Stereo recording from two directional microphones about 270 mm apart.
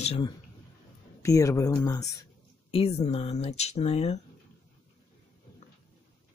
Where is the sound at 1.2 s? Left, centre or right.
Centre.